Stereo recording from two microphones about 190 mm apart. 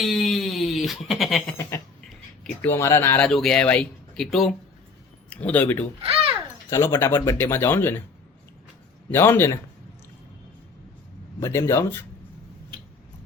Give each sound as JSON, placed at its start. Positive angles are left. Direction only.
{"t": 0.0, "sound": "a sound", "side_deg": 0}
{"t": 2.4, "sound": "speech", "side_deg": 10}
{"t": 6.0, "sound": "babbling", "side_deg": -30}
{"t": 6.7, "sound": "speech", "side_deg": 15}
{"t": 9.1, "sound": "speech", "side_deg": 10}
{"t": 11.3, "sound": "speech", "side_deg": 15}